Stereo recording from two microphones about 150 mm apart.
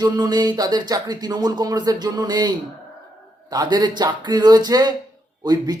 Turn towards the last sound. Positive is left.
turn(degrees=-25)  # may be behind; listen again after turning